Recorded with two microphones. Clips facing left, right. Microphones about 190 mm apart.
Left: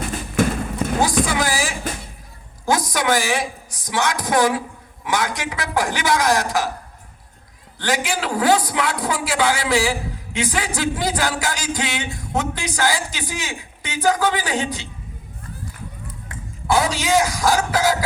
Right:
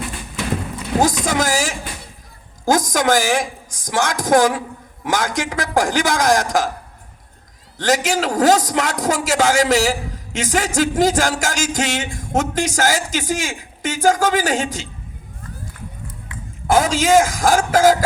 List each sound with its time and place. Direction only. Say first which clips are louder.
0.1 s clip-clop: left 4 dB; 50° left (ahead or behind)
1.2 s a sound: right 2 dB; 45° right (ahead or behind)
2.6 s a woman's voice: right 3 dB; 45° right (ahead or behind)
7.8 s a man's voice: right 5 dB; 45° right (ahead or behind)
16.6 s a man's voice: right 4 dB; 45° right (ahead or behind)